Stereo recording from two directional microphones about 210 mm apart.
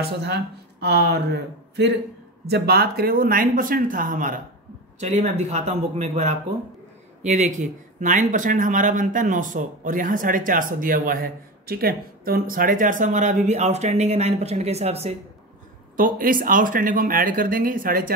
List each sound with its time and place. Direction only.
0.2 s speech: 50° right (ahead or behind); by 15.1 s 30° right (ahead or behind)
16.0 s speech: 40° right (ahead or behind)